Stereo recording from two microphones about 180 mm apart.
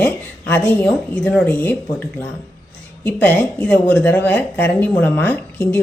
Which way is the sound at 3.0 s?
10° left (ahead or behind).